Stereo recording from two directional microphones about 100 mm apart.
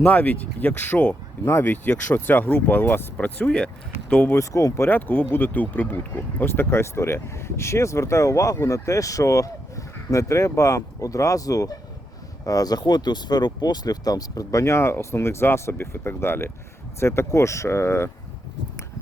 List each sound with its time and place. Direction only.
0.0 s speech: 15° left (ahead or behind)
4.4 s speech: 30° left (ahead or behind)
4.9 s speech: 20° left (ahead or behind)